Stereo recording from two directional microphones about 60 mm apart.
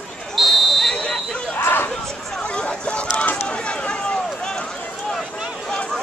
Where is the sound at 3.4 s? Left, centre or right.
Centre.